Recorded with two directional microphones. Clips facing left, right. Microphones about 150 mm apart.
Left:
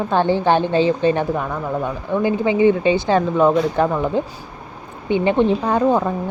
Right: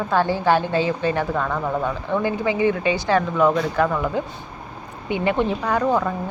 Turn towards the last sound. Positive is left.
turn(degrees=25)  # may be behind; listen again after turning